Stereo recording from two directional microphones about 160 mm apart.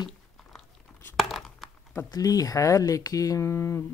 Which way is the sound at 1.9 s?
20° left (ahead or behind).